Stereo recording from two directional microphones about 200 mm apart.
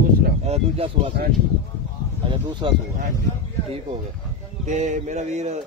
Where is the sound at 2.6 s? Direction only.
25° right (ahead or behind).